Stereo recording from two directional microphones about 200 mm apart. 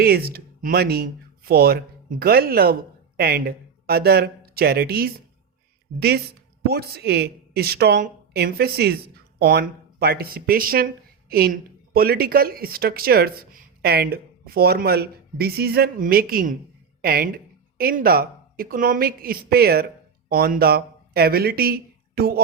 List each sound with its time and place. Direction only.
0.0 s a woman's voice: 50° right (ahead or behind)